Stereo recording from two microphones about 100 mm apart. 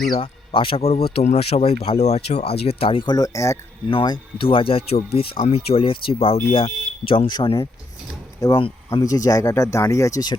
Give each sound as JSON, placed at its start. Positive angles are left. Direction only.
{"t": 0.2, "sound": "speech", "side_deg": 65}
{"t": 3.1, "sound": "speech", "side_deg": 40}
{"t": 3.8, "sound": "speech", "side_deg": 50}
{"t": 4.4, "sound": "speech", "side_deg": 70}
{"t": 7.4, "sound": "speech", "side_deg": 50}
{"t": 9.0, "sound": "speech", "side_deg": 35}